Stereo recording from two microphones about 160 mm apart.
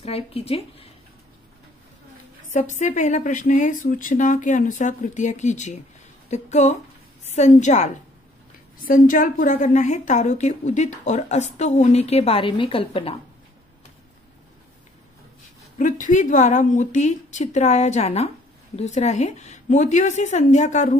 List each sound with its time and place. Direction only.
0.0 s speech: 40° left (ahead or behind)
2.5 s a woman's voice: 50° left (ahead or behind)
8.8 s a woman's voice: 60° left (ahead or behind); by 13.2 s 35° left (ahead or behind)
15.8 s a woman's voice: 50° left (ahead or behind)